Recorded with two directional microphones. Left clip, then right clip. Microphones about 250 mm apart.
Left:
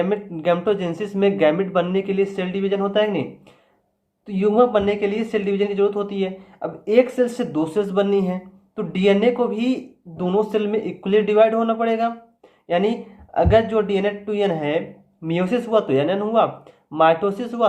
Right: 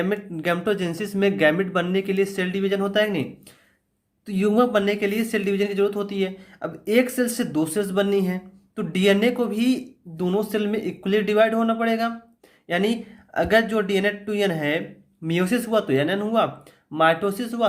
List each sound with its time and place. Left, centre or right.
0.0 s speech: right
4.3 s speech: right